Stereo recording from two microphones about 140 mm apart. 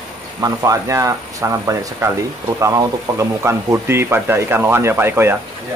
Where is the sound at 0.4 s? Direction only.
25° right (ahead or behind).